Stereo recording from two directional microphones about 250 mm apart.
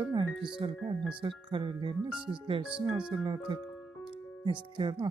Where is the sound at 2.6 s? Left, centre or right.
Centre.